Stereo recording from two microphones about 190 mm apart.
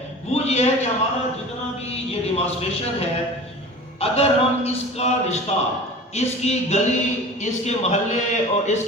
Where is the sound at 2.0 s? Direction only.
35° left (ahead or behind).